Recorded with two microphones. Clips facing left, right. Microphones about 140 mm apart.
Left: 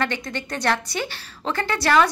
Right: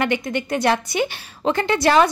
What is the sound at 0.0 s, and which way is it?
A woman's voice, 15° right (ahead or behind).